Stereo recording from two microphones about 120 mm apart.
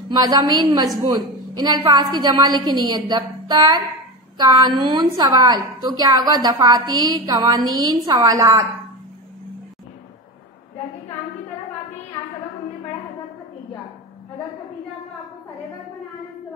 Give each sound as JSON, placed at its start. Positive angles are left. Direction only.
{"t": 0.2, "sound": "a woman's voice", "side_deg": -35}